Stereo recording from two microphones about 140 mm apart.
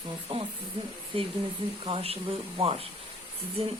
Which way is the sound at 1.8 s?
40° right (ahead or behind).